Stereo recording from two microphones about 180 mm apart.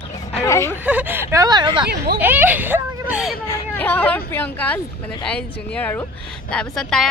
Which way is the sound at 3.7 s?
10° left (ahead or behind).